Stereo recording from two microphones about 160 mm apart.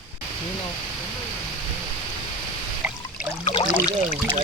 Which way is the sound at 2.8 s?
10° right (ahead or behind).